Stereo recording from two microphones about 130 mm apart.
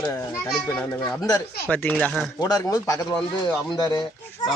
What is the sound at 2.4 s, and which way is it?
Speech, 30° left (ahead or behind).